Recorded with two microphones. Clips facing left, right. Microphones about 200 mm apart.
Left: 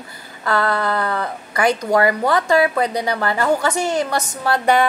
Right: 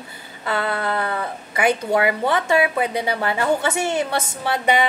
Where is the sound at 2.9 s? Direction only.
25° right (ahead or behind).